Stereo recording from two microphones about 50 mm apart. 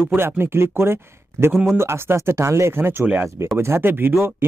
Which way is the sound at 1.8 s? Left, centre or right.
Right.